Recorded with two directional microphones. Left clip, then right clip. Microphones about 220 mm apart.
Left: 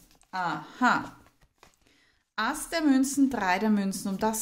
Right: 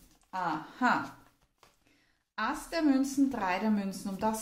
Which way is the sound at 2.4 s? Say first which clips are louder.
Left 3 dB; 40° left (ahead or behind).